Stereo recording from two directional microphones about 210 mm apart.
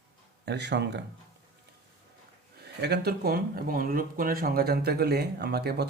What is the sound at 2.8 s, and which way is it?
Speech, 50° right (ahead or behind).